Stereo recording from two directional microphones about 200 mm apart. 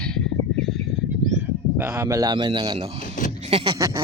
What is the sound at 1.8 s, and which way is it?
A man's voice, 15° right (ahead or behind).